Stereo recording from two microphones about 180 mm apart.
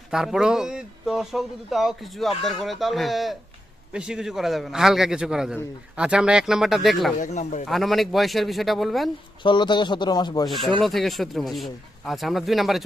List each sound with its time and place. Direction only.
0.1 s speech: centre (ahead or behind)
7.2 s speech: 40° left (ahead or behind)
7.7 s speech: centre (ahead or behind)
9.4 s a man's voice: 25° left (ahead or behind)
10.5 s speech: centre (ahead or behind)